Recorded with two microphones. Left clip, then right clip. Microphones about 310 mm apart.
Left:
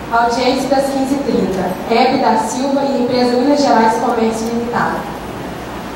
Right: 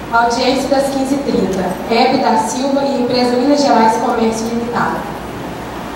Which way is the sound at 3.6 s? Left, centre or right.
Centre.